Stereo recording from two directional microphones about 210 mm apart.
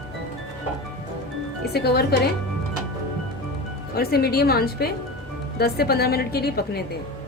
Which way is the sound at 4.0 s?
50° left (ahead or behind).